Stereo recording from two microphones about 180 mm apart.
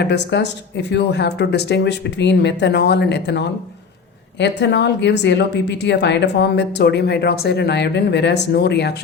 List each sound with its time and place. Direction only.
0.0 s a woman's voice: 70° left (ahead or behind)